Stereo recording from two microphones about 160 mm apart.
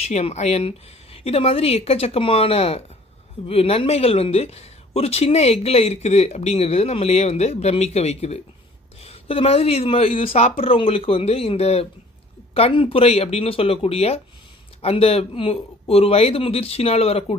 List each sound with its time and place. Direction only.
0.0 s speech: 40° left (ahead or behind)